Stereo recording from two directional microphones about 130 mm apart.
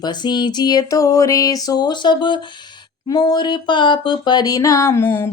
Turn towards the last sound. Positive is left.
turn(degrees=15)  # may be behind; listen again after turning